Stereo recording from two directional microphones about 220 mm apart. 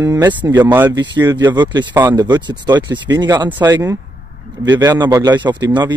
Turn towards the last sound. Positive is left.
turn(degrees=-20)  # may be behind; listen again after turning